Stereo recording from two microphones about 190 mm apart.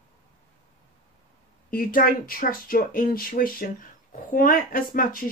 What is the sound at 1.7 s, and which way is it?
Speech, 50° left (ahead or behind).